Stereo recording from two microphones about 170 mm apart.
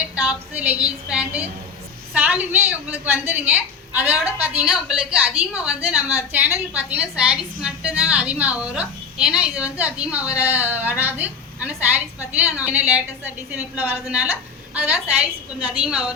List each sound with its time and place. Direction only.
0.2 s a woman's voice: 5° right (ahead or behind)